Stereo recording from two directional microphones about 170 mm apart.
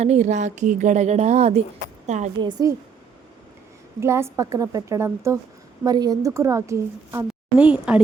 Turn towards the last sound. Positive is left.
turn(degrees=-5)  # may be behind; listen again after turning